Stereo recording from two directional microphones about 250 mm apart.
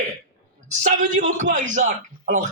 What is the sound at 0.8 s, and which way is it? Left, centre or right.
A man's voice, right.